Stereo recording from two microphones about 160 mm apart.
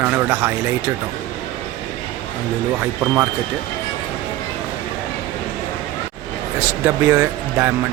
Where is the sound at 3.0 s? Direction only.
25° right (ahead or behind).